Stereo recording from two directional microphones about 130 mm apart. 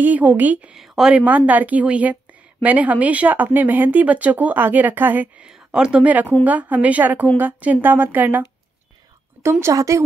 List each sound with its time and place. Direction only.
0.0 s a woman's voice: 15° right (ahead or behind)